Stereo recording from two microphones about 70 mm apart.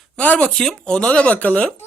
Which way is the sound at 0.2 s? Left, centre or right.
Left.